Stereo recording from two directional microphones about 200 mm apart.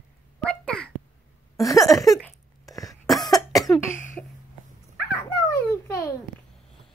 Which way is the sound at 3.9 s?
40° left (ahead or behind).